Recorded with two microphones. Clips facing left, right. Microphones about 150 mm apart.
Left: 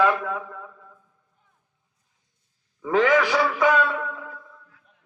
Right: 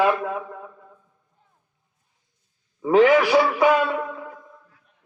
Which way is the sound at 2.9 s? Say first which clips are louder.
Right 4 dB; 20° right (ahead or behind).